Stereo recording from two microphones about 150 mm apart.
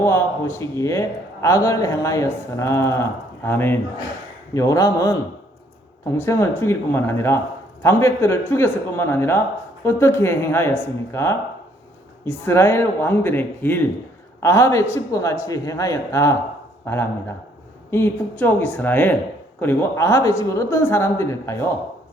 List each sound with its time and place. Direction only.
0.0 s a man's voice: 15° left (ahead or behind)